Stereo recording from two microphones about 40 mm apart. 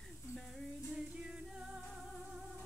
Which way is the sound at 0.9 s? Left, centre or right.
Right.